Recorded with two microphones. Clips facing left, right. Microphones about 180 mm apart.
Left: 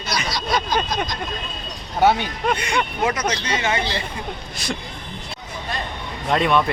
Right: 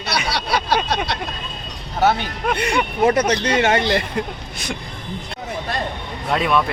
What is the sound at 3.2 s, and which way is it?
Speech, 55° right (ahead or behind).